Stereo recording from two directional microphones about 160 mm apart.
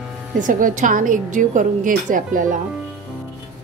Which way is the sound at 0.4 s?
55° right (ahead or behind).